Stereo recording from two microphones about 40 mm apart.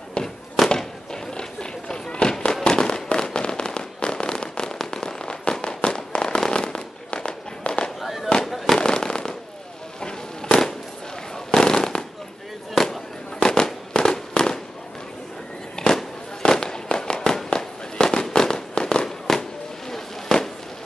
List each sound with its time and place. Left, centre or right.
0.7 s fireworks: centre
8.0 s fireworks: centre
8.7 s firecracker: centre
9.9 s fireworks: left
13.4 s fireworks: centre
16.0 s fireworks: centre
19.0 s fireworks: centre